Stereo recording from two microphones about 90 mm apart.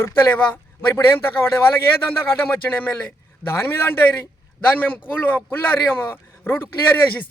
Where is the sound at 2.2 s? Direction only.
25° left (ahead or behind).